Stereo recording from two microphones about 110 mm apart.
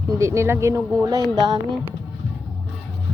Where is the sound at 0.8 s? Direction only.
5° left (ahead or behind).